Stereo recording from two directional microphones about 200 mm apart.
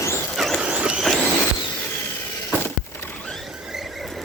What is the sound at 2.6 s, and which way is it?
Squeal, 5° left (ahead or behind).